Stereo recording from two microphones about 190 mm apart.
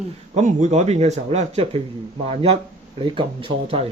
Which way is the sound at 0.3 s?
40° right (ahead or behind).